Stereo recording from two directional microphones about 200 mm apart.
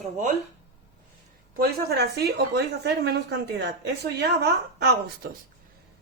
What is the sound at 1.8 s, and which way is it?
A woman's voice, 55° right (ahead or behind).